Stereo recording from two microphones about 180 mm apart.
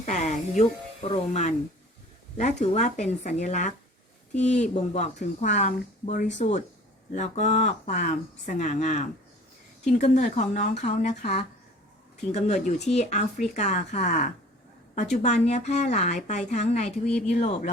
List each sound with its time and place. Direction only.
0.0 s speech: 40° left (ahead or behind)